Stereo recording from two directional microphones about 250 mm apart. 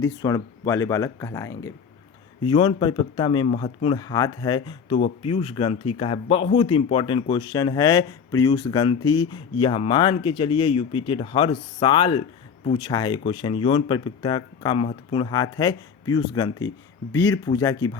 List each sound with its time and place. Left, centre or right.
0.0 s speech: centre